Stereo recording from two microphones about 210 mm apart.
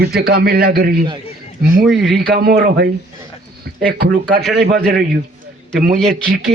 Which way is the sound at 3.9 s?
50° right (ahead or behind).